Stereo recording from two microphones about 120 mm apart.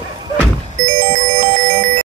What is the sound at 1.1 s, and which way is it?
Music, 90° right.